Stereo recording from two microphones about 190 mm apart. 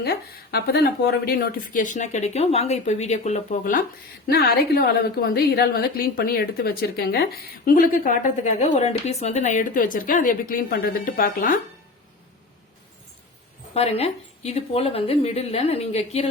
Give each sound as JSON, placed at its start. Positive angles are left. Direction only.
{"t": 0.0, "sound": "a woman's voice", "side_deg": 60}
{"t": 4.3, "sound": "a woman's voice", "side_deg": 55}
{"t": 13.7, "sound": "speech", "side_deg": 35}